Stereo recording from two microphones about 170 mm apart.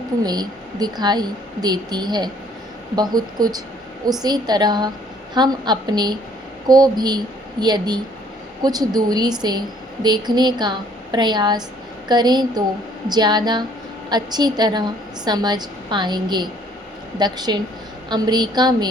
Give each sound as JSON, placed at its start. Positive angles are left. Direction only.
{"t": 0.2, "sound": "a woman's voice", "side_deg": -25}